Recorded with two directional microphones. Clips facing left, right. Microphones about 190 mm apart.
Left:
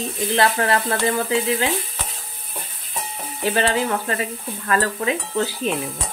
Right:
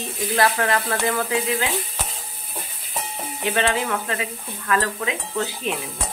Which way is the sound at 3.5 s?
40° left (ahead or behind).